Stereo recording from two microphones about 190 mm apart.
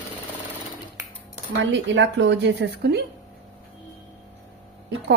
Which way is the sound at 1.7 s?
70° right (ahead or behind).